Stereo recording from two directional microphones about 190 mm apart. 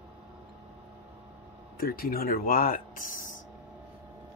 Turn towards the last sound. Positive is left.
turn(degrees=45)  # may be behind; listen again after turning